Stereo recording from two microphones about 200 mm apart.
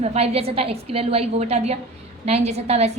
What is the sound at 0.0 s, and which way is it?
A woman's voice, 30° right (ahead or behind).